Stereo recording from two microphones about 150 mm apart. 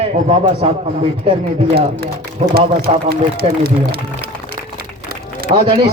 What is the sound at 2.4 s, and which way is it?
Speech, 50° right (ahead or behind).